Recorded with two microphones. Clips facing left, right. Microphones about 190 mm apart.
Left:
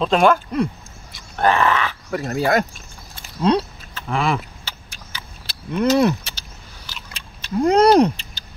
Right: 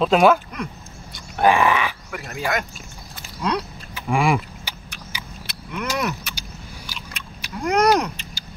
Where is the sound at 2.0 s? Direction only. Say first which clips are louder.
Left 7 dB; 35° left (ahead or behind).